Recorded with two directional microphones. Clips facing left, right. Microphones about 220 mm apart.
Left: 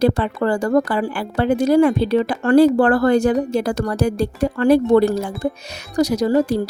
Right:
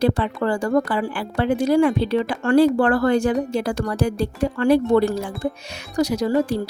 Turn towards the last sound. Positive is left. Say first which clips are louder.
# left 3 dB
turn(degrees=40)  # may be behind; listen again after turning